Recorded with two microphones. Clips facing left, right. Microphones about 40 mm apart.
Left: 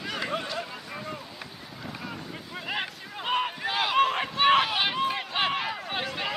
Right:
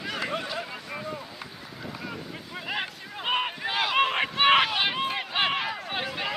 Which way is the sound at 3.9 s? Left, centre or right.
Right.